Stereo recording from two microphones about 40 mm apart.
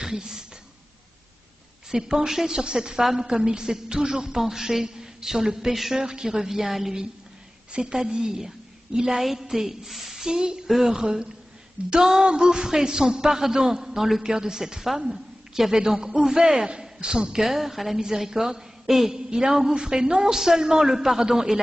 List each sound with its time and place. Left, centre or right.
0.0 s a sound: centre
1.9 s a woman's voice: centre
9.2 s a woman's voice: centre
10.3 s a woman's voice: right
11.9 s a woman's voice: right
17.4 s a woman's voice: centre